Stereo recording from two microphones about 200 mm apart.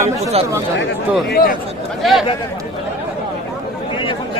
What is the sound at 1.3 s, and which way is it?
Speech, 50° left (ahead or behind).